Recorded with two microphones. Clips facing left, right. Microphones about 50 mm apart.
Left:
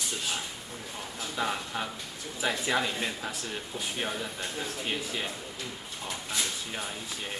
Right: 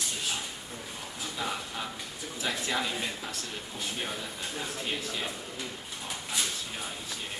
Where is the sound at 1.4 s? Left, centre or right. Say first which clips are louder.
Left 4 dB; centre.